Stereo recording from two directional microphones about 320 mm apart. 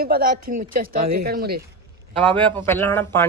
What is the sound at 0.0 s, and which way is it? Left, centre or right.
Speech, right.